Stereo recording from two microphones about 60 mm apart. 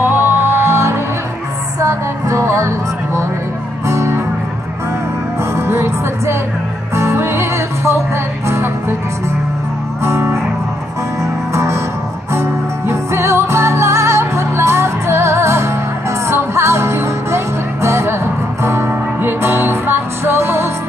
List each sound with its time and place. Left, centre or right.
0.0 s music: right
1.8 s music: right
3.8 s music: right
5.4 s music: right
10.0 s music: right
11.5 s music: right